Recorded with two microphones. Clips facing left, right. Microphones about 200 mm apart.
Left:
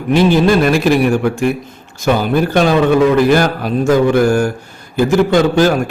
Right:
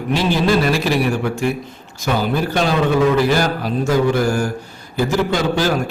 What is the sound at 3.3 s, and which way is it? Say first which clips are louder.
Mantra: left 5 dB; 55° left (ahead or behind).